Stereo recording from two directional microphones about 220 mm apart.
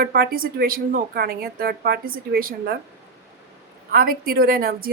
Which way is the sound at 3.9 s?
40° right (ahead or behind).